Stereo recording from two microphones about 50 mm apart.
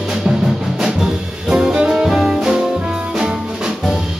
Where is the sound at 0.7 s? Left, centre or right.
Centre.